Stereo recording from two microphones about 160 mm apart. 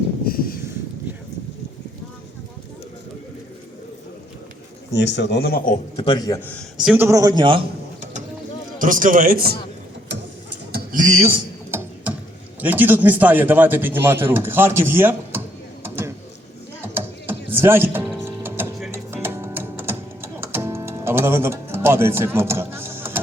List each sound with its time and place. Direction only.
0.3 s a sound: 65° left (ahead or behind)
4.9 s speech: 90° left; by 5.8 s 60° left (ahead or behind)
6.0 s a man's voice: 30° left (ahead or behind)
6.7 s a man's voice: 10° right (ahead or behind); by 7.6 s 30° right (ahead or behind)
8.8 s a man's voice: 60° right (ahead or behind)
10.7 s a sound: 75° right (ahead or behind)
11.0 s a man's voice: 50° right (ahead or behind)
11.7 s tick-tock: 15° right (ahead or behind)
12.5 s a man's voice: 10° right (ahead or behind)
15.8 s a sound: 15° right (ahead or behind)
18.3 s music: 15° right (ahead or behind)